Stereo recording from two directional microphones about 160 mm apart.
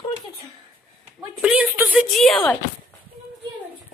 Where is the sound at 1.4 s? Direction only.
10° right (ahead or behind).